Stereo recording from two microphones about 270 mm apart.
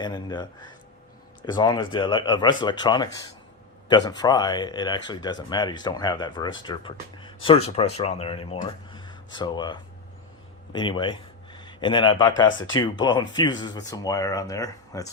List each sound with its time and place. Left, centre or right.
0.0 s a man's voice: centre
12.5 s speech: left
12.7 s speech: centre